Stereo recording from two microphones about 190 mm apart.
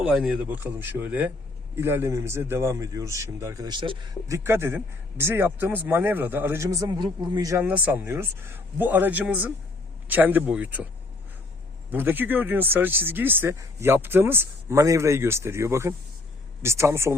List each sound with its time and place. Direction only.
0.0 s speech: centre (ahead or behind); by 4.4 s 25° right (ahead or behind)
4.4 s speech: 15° right (ahead or behind)
11.9 s speech: 10° right (ahead or behind)